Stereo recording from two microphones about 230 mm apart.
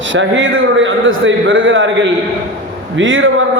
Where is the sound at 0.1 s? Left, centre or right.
Right.